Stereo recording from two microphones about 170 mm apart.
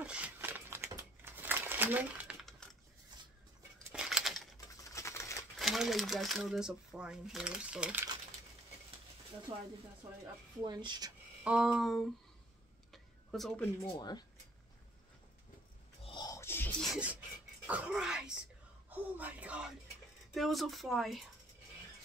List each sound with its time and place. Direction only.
0.0 s crumpling: 5° right (ahead or behind)
3.9 s a sound: 5° right (ahead or behind)
4.8 s typewriter: 15° left (ahead or behind)
5.6 s speech: centre (ahead or behind)
10.2 s speech: 25° right (ahead or behind)
11.4 s speech: 5° right (ahead or behind)
12.9 s a sound: centre (ahead or behind)
13.9 s speech: 25° left (ahead or behind)
16.0 s a sound: 30° left (ahead or behind); by 16.7 s 15° left (ahead or behind)
16.8 s filing: 5° right (ahead or behind)
17.6 s throat clearing: 5° right (ahead or behind)
18.9 s a sound: 10° right (ahead or behind)
20.3 s speech: centre (ahead or behind)